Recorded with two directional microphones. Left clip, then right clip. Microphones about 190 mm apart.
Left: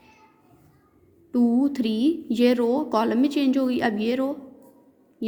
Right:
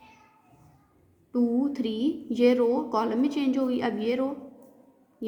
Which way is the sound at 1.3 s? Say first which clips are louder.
Left 4 dB; 40° left (ahead or behind).